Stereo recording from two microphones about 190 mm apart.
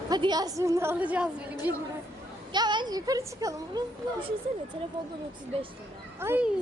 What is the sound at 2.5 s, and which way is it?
A woman's voice, 25° right (ahead or behind).